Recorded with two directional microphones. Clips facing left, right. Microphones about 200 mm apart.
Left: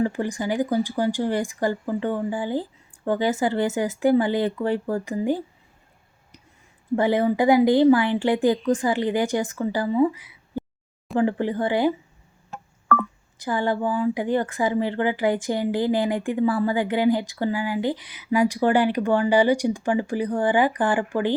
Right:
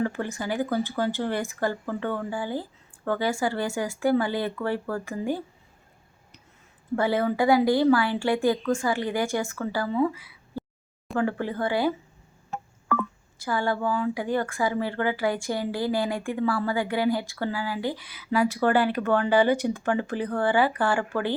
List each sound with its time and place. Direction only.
0.0 s speech: 15° left (ahead or behind)
6.9 s speech: 20° left (ahead or behind)
13.4 s speech: 20° left (ahead or behind)